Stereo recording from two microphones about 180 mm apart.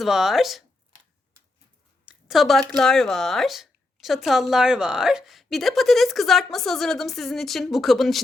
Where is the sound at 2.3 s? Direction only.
Centre (ahead or behind).